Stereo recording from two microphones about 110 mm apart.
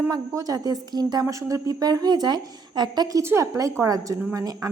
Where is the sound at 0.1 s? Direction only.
35° right (ahead or behind).